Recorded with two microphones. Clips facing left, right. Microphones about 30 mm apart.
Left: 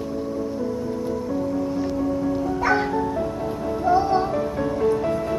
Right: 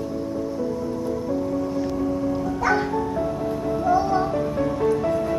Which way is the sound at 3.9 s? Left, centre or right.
Left.